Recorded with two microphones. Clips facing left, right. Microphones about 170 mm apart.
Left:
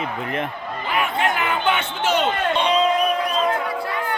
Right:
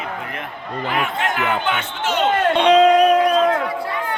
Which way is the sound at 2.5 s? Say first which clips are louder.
Right 8 dB; 80° right.